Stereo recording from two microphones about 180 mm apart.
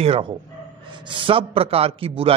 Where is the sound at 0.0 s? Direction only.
35° right (ahead or behind).